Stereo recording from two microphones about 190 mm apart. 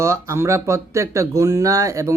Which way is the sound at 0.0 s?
15° right (ahead or behind).